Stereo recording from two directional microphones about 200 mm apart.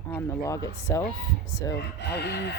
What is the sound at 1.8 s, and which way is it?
Speech, 55° left (ahead or behind).